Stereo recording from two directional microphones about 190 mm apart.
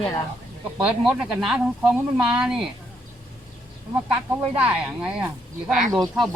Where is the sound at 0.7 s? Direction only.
5° right (ahead or behind).